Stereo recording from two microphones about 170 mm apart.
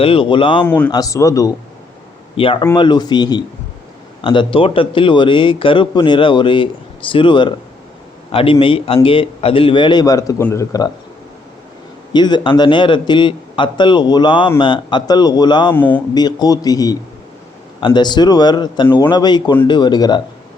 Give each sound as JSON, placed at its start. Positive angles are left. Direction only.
{"t": 0.0, "sound": "a man's voice", "side_deg": 30}
{"t": 0.6, "sound": "a man's voice", "side_deg": 10}
{"t": 2.3, "sound": "a man's voice", "side_deg": 30}
{"t": 12.1, "sound": "a man's voice", "side_deg": 25}
{"t": 15.7, "sound": "speech", "side_deg": 10}
{"t": 16.1, "sound": "a man's voice", "side_deg": 25}